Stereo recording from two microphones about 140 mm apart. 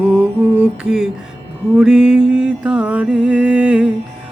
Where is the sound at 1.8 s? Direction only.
5° right (ahead or behind).